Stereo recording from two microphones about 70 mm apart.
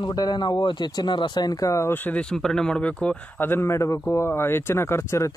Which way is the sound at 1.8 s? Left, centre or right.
Left.